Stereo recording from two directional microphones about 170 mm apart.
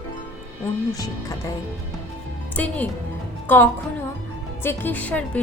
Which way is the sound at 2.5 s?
10° left (ahead or behind).